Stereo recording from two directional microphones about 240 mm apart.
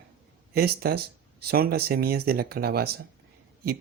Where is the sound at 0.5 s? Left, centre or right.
Right.